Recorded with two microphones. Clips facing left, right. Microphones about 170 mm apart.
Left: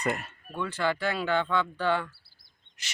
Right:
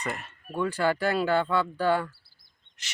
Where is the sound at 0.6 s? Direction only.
40° right (ahead or behind).